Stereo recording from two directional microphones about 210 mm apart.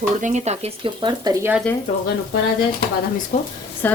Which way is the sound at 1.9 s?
30° left (ahead or behind).